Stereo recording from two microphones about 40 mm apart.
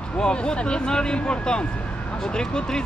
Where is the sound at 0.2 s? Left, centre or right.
Left.